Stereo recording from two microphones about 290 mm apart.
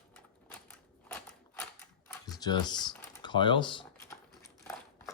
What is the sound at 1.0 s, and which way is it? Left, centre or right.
Mechanisms, centre.